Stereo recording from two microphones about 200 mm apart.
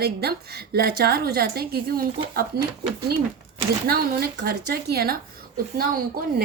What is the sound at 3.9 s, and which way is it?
A woman's voice, 50° right (ahead or behind).